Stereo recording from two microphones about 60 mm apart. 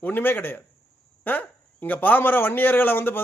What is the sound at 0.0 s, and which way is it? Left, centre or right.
A man's voice, left.